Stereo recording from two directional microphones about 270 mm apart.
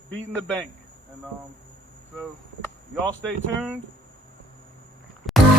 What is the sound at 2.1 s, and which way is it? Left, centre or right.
Speech, centre.